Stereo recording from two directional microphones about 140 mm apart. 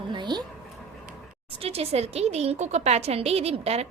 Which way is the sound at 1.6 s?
45° right (ahead or behind).